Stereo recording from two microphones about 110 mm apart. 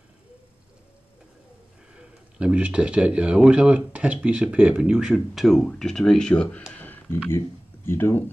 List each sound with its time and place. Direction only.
2.0 s speech: 10° right (ahead or behind); by 6.6 s 10° left (ahead or behind)
6.7 s a sound: 15° left (ahead or behind)
7.2 s speech: 20° left (ahead or behind)